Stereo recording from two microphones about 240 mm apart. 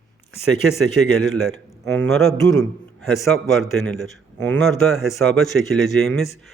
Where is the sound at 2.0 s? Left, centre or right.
Centre.